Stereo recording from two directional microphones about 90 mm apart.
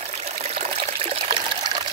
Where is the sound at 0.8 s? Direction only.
90° right.